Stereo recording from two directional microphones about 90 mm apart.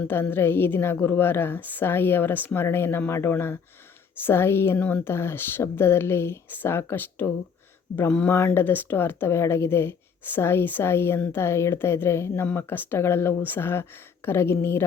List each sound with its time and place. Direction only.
0.1 s speech: 25° left (ahead or behind)